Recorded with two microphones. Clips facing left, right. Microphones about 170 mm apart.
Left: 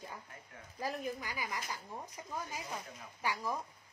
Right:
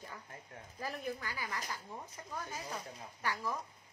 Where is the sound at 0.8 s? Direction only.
15° left (ahead or behind).